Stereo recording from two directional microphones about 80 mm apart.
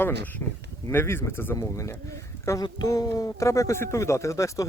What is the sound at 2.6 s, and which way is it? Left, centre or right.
Speech, left.